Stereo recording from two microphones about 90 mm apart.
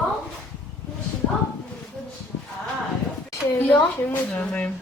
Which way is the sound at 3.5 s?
20° left (ahead or behind).